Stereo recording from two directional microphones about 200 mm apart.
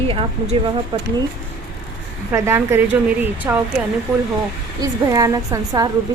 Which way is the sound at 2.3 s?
10° right (ahead or behind).